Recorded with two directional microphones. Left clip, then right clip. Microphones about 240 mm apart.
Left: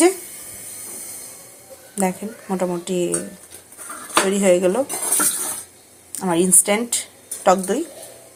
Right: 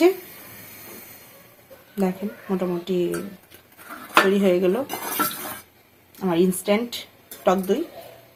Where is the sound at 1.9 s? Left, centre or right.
Centre.